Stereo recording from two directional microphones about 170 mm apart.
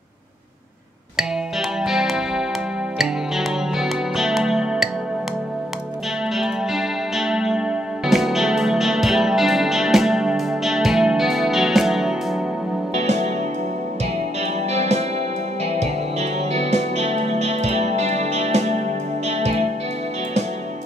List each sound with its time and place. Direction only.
1.8 s music: centre (ahead or behind)
6.3 s music: centre (ahead or behind)
12.9 s music: 40° right (ahead or behind)
14.7 s music: 40° right (ahead or behind)